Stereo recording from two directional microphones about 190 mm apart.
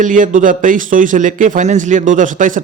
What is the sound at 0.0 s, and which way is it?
A man's voice, 45° right (ahead or behind).